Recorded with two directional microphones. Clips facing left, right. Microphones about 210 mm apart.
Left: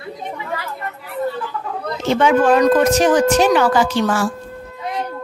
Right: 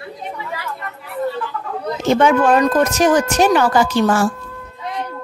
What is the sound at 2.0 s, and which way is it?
Speech, 45° right (ahead or behind).